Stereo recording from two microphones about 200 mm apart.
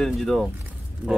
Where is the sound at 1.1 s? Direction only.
5° right (ahead or behind).